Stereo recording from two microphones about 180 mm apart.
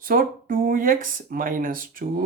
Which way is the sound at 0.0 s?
50° right (ahead or behind).